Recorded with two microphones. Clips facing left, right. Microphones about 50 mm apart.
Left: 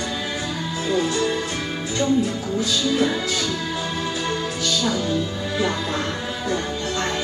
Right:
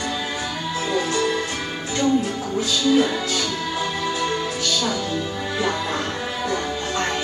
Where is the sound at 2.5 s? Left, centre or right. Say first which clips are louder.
Right 3 dB; right.